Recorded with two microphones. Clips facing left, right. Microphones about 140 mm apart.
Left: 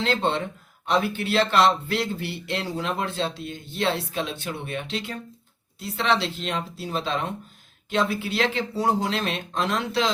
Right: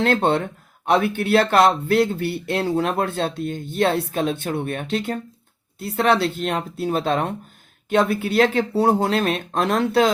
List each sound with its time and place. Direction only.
0.0 s speech: 55° right (ahead or behind)